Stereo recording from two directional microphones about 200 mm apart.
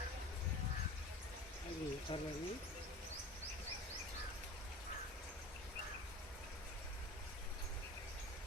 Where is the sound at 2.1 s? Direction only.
25° left (ahead or behind).